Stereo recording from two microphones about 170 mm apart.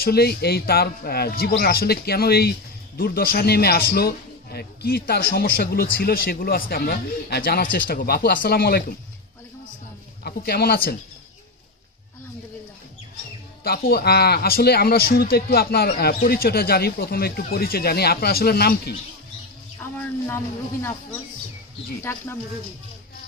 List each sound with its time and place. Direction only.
0.0 s a man's voice: 65° left (ahead or behind)
10.2 s speech: 70° left (ahead or behind)
13.7 s a man's voice: 65° left (ahead or behind)
19.8 s speech: 15° left (ahead or behind)